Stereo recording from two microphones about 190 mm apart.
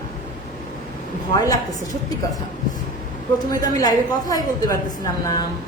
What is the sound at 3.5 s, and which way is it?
A woman's voice, 20° left (ahead or behind).